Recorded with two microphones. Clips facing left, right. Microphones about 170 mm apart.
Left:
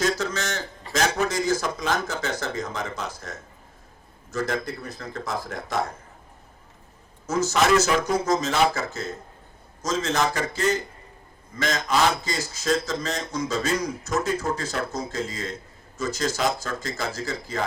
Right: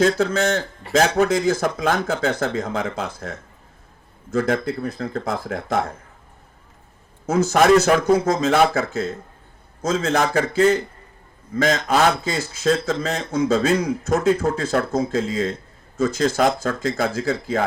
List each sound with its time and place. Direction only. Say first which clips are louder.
0.0 s speech: right 8 dB; 55° right (ahead or behind)
7.3 s speech: right 6 dB; 55° right (ahead or behind)